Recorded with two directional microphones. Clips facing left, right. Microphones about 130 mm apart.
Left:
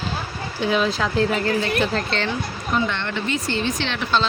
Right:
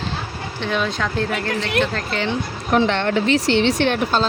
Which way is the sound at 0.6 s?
5° left (ahead or behind).